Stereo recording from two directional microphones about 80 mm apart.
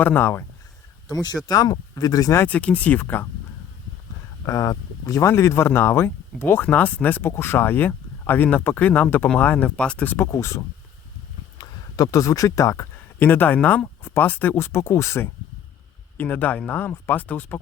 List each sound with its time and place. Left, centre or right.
0.0 s speech: left
1.5 s speech: left
2.5 s speech: centre
4.4 s speech: left; by 10.2 s centre
10.3 s speech: left
11.5 s a sound: left
12.1 s speech: left; by 13.8 s centre
13.8 s speech: left
16.1 s speech: left